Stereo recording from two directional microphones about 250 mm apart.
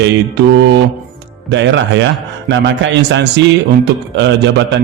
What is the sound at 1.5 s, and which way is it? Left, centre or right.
A man's voice, right.